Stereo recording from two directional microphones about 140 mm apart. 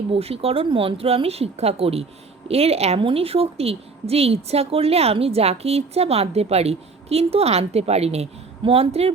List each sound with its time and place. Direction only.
0.1 s a woman's voice: 45° right (ahead or behind)